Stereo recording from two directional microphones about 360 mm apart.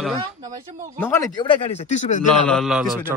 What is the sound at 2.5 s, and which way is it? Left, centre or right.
Speech, centre.